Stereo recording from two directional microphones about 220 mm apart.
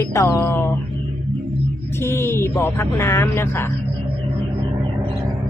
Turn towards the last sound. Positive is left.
turn(degrees=10)  # may be behind; listen again after turning